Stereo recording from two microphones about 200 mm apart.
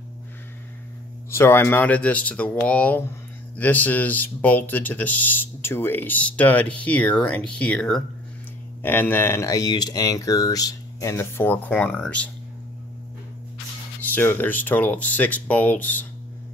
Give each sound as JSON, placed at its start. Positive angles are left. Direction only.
{"t": 1.3, "sound": "speech", "side_deg": 10}
{"t": 14.0, "sound": "speech", "side_deg": 10}